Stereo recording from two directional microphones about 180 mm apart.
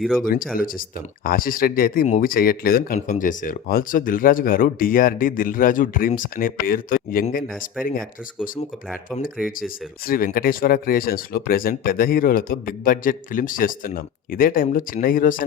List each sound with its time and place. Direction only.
0.0 s speech: centre (ahead or behind)
0.5 s speech: 50° left (ahead or behind)
9.6 s speech: 50° left (ahead or behind)